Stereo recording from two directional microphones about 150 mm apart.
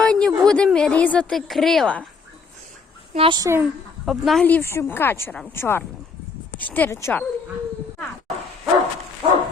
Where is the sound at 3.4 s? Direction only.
15° right (ahead or behind).